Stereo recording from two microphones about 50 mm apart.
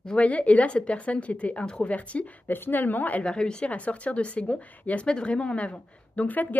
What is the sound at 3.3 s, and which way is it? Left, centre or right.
Speech, centre.